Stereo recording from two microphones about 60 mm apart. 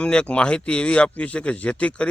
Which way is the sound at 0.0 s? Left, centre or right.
Centre.